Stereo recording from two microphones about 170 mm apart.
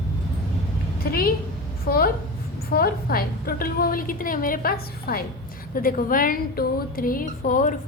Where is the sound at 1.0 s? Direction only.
60° left (ahead or behind).